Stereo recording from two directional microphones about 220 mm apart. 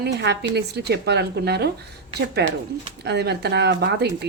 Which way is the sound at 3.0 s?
50° right (ahead or behind).